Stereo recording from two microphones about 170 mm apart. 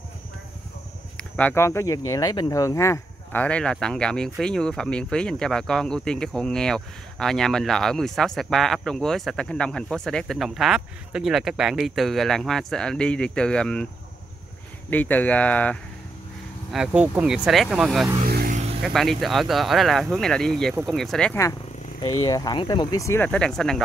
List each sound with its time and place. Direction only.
1.1 s speech: 10° left (ahead or behind)
14.9 s speech: 10° left (ahead or behind)
16.7 s speech: 5° right (ahead or behind)
18.2 s vehicle: 60° right (ahead or behind)
18.9 s speech: centre (ahead or behind)
22.0 s speech: 25° left (ahead or behind); by 23.8 s 5° left (ahead or behind)